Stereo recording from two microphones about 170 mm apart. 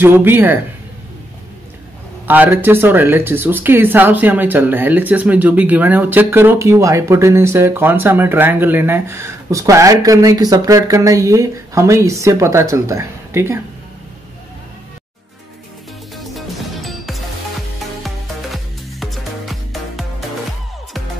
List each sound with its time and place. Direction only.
0.0 s speech: 10° right (ahead or behind)
2.2 s speech: 10° right (ahead or behind)
16.2 s music: centre (ahead or behind)